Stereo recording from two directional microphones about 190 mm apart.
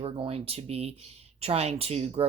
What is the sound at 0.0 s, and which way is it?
Speech, 30° right (ahead or behind).